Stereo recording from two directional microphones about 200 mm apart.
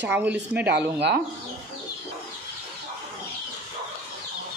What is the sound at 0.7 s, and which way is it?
Speech, 60° right (ahead or behind).